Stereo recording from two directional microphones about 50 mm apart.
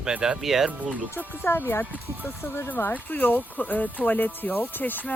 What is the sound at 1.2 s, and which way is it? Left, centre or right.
Speech, left.